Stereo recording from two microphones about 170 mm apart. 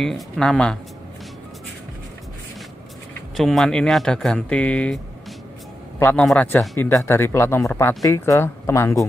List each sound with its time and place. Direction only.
0.0 s speech: 5° left (ahead or behind)
3.3 s a man's voice: centre (ahead or behind)